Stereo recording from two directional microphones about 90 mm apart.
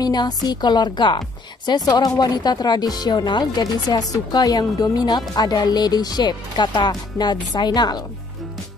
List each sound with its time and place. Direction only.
0.0 s speech: 50° left (ahead or behind)
1.7 s speech: 50° left (ahead or behind)